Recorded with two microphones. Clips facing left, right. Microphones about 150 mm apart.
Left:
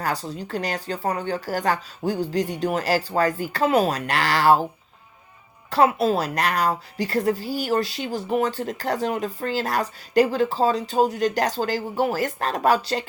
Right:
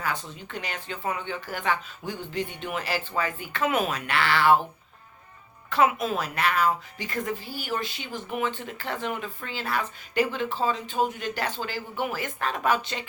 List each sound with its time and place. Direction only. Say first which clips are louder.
0.0 s a woman's voice: left 5 dB; 35° left (ahead or behind)
5.7 s a woman's voice: left 5 dB; 35° left (ahead or behind)